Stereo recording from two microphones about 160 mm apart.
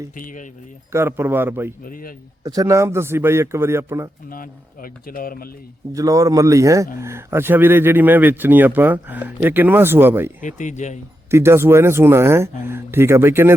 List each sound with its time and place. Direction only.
0.2 s speech: 60° left (ahead or behind)
0.9 s a man's voice: 15° right (ahead or behind)
1.8 s speech: 60° left (ahead or behind)
2.4 s a man's voice: 25° right (ahead or behind)
4.3 s speech: 60° left (ahead or behind)
5.9 s a man's voice: 20° right (ahead or behind)
10.4 s speech: 50° left (ahead or behind)
11.3 s a man's voice: 15° right (ahead or behind)